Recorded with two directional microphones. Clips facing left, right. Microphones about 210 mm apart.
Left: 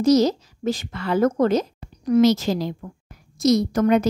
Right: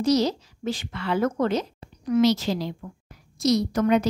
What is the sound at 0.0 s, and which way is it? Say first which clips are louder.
Speech: left 5 dB; 45° left (ahead or behind).